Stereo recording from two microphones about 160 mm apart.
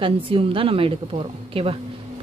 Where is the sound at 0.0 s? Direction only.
35° right (ahead or behind).